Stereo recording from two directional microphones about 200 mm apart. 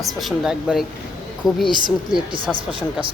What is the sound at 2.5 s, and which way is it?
Speech, 25° right (ahead or behind).